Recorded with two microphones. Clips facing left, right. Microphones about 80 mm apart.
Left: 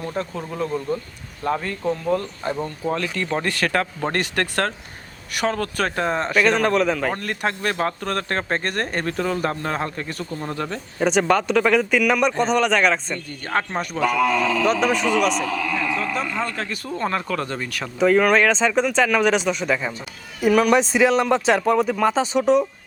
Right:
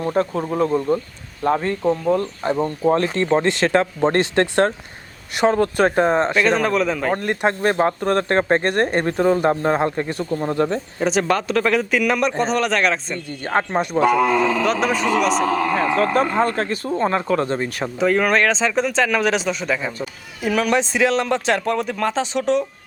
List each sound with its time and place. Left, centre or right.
0.0 s speech: right
1.8 s speech: centre
6.3 s speech: centre
7.2 s speech: right
11.0 s speech: centre
13.5 s speech: right
14.6 s speech: centre
15.3 s a man's voice: right
16.9 s speech: right
18.0 s speech: centre